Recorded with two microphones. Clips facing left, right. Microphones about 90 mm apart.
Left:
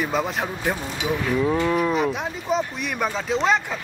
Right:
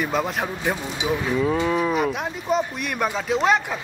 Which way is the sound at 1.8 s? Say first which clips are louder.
Even; centre (ahead or behind).